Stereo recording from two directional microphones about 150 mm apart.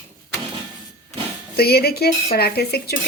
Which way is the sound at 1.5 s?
90° left.